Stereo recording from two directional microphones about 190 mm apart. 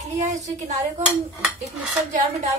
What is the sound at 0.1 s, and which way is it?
Speech, 40° right (ahead or behind).